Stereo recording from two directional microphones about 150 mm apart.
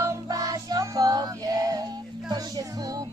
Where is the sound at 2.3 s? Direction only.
25° right (ahead or behind).